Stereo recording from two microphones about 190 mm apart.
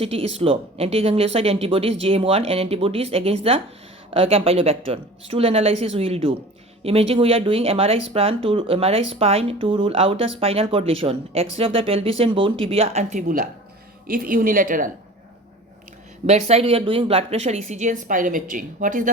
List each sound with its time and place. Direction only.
0.0 s speech: 30° right (ahead or behind)
16.2 s speech: 35° right (ahead or behind)